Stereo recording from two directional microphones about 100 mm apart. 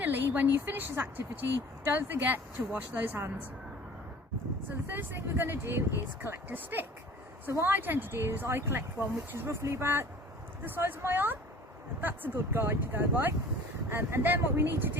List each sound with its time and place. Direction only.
0.0 s a woman's voice: 20° right (ahead or behind)
4.9 s speech: 20° right (ahead or behind)